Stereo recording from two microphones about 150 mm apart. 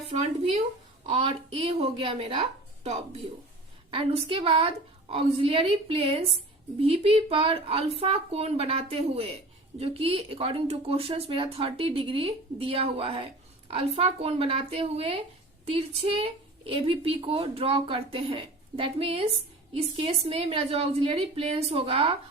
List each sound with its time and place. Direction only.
0.1 s a woman's voice: 45° right (ahead or behind)
3.9 s a woman's voice: 40° right (ahead or behind)